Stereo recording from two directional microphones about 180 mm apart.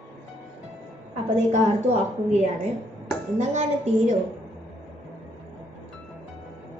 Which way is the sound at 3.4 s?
40° right (ahead or behind).